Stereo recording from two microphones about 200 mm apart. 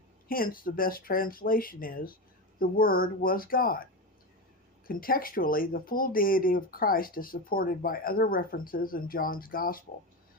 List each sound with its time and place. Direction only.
0.3 s speech: 45° left (ahead or behind)
4.9 s speech: 45° left (ahead or behind)